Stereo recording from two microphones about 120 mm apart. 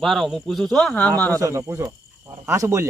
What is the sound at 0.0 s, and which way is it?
Speech, centre (ahead or behind).